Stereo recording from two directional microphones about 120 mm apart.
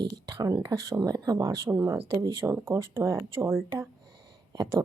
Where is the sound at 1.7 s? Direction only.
20° right (ahead or behind).